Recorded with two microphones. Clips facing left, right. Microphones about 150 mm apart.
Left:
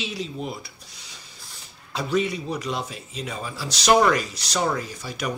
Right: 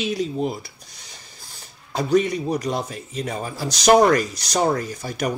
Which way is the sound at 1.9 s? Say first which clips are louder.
Right 5 dB; 45° right (ahead or behind).